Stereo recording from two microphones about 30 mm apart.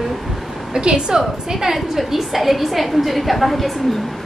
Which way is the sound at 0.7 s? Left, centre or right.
Right.